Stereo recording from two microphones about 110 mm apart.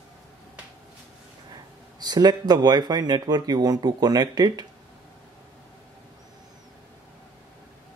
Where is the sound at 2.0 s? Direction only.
40° right (ahead or behind).